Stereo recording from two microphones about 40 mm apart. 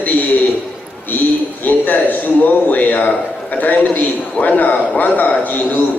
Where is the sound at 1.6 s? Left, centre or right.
Left.